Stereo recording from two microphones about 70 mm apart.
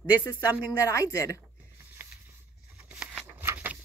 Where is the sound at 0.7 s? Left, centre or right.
Left.